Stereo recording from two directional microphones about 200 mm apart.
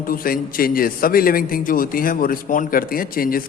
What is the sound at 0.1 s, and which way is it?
A man's voice, 45° left (ahead or behind).